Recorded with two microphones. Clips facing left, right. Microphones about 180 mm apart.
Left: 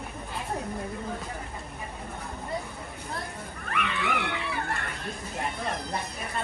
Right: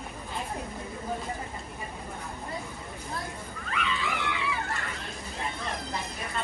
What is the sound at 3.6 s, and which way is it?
Wild animals, 60° left (ahead or behind).